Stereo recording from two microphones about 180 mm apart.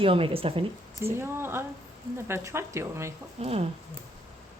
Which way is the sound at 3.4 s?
35° right (ahead or behind).